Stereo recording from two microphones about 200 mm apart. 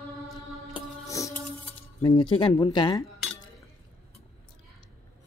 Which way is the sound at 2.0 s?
25° left (ahead or behind).